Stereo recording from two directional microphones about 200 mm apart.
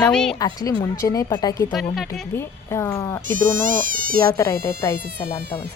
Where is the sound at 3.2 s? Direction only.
40° right (ahead or behind).